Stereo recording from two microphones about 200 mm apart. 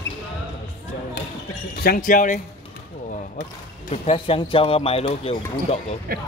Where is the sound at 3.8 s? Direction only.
30° left (ahead or behind).